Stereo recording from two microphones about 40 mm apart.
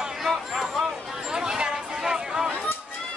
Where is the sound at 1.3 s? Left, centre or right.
Centre.